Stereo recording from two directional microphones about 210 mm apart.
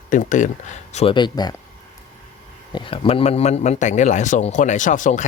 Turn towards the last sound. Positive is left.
turn(degrees=35)  # may be behind; listen again after turning